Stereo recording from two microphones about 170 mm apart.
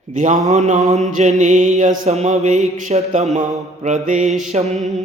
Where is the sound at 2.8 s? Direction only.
45° right (ahead or behind).